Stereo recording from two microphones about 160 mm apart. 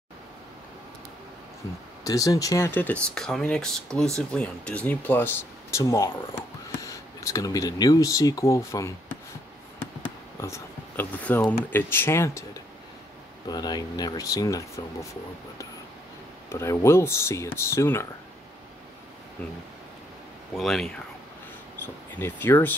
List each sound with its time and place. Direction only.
2.0 s speech: 20° left (ahead or behind)
10.4 s speech: 15° left (ahead or behind)
13.5 s speech: 25° left (ahead or behind)
16.4 s speech: 15° left (ahead or behind)
20.5 s speech: centre (ahead or behind)
22.2 s speech: 15° left (ahead or behind)